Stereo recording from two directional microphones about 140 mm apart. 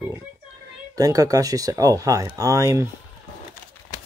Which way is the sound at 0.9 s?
25° right (ahead or behind).